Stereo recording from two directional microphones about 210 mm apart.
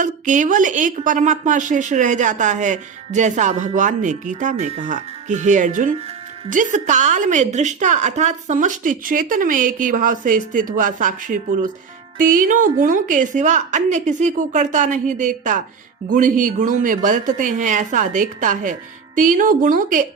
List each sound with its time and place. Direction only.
0.0 s speech: 35° right (ahead or behind)